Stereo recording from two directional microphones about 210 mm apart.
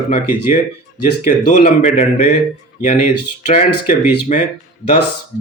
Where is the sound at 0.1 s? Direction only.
40° left (ahead or behind).